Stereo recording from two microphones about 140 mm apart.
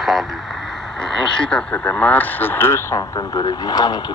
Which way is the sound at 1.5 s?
10° left (ahead or behind).